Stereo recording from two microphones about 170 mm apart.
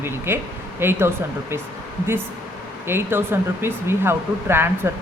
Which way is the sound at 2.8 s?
15° right (ahead or behind).